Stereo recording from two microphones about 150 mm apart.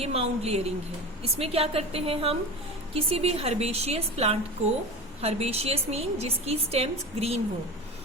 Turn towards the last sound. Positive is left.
turn(degrees=-45)  # may be behind; listen again after turning